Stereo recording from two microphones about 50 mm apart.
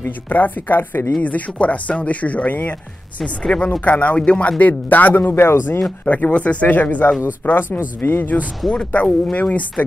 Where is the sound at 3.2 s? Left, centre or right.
Left.